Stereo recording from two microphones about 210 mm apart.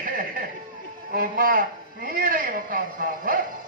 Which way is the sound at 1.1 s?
40° right (ahead or behind).